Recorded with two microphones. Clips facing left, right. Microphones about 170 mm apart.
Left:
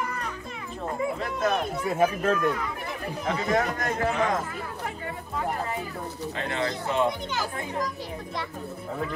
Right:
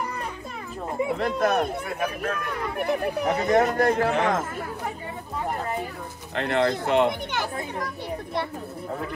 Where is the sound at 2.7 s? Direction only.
60° right (ahead or behind).